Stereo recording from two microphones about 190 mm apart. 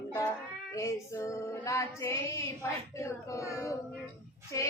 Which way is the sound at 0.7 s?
15° left (ahead or behind).